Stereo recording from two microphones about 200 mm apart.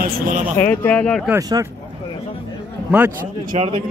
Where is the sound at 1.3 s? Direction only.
15° right (ahead or behind).